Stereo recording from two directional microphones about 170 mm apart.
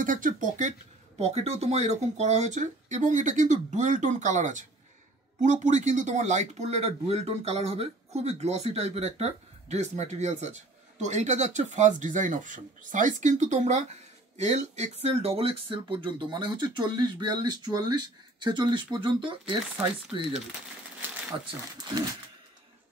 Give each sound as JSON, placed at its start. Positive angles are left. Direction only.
{"t": 0.0, "sound": "speech", "side_deg": -50}
{"t": 1.1, "sound": "speech", "side_deg": -35}